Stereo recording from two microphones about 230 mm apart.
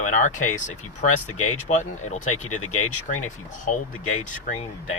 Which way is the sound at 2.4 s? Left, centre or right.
Left.